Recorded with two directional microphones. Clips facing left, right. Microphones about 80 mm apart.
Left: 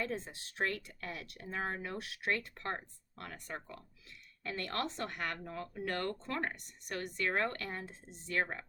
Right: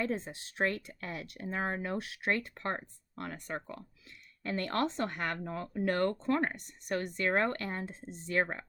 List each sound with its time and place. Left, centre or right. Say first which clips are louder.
0.0 s speech: right 4 dB; right